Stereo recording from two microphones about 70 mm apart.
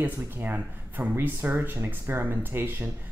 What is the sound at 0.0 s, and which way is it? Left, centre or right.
Speech, right.